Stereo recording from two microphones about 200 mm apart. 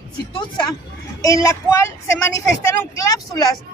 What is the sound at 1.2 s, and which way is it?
Speech, 15° left (ahead or behind).